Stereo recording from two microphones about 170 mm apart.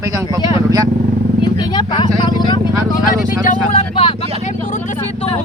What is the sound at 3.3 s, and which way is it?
Speech, 45° left (ahead or behind).